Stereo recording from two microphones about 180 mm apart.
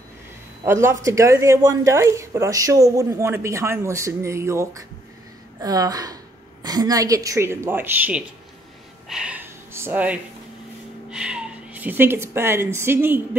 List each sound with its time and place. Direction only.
0.7 s a woman's voice: 15° right (ahead or behind)
9.1 s a sound: 5° right (ahead or behind)
11.1 s speech: 5° right (ahead or behind)